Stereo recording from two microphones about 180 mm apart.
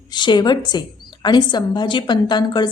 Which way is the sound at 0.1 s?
25° left (ahead or behind).